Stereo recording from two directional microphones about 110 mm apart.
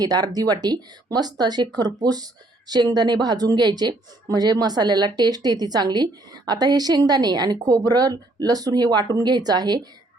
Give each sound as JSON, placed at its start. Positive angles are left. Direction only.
{"t": 0.0, "sound": "speech", "side_deg": -35}